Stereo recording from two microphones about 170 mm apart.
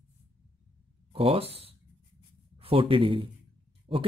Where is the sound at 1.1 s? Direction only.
35° right (ahead or behind).